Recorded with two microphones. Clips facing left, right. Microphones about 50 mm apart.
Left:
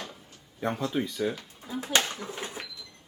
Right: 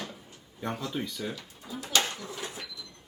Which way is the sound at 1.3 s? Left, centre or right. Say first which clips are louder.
Left 3 dB; left.